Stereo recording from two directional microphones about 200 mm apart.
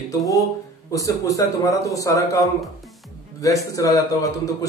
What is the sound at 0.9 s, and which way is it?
A man's voice, 15° left (ahead or behind).